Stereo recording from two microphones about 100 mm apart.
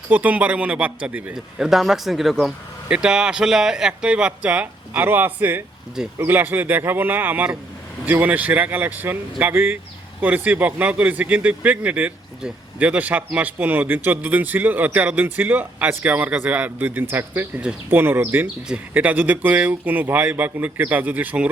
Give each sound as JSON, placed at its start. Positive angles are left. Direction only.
{"t": 0.1, "sound": "speech", "side_deg": -15}